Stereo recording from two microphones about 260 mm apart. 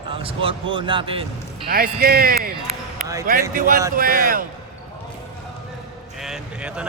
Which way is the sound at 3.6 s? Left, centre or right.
Right.